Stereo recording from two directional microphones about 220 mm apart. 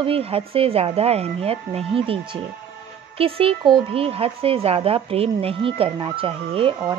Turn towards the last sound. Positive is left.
turn(degrees=-25)  # may be behind; listen again after turning